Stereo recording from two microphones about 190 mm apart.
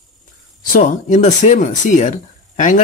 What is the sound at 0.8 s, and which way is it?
Speech, 40° left (ahead or behind).